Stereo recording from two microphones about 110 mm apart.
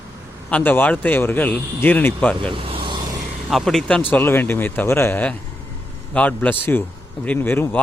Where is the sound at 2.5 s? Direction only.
55° right (ahead or behind).